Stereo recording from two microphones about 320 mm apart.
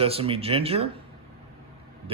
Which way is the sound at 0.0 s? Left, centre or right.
Centre.